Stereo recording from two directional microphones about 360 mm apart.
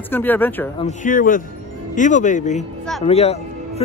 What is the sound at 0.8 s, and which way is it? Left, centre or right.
A man's voice, left.